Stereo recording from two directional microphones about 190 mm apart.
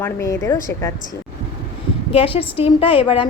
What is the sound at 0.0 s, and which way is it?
Speech, 15° left (ahead or behind).